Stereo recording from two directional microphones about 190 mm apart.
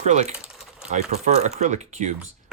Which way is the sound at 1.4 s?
35° right (ahead or behind).